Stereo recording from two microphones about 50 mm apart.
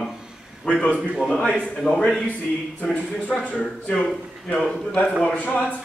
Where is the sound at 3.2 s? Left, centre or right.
Left.